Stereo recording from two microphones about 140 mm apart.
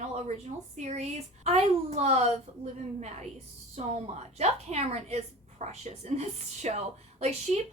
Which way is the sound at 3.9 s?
50° right (ahead or behind).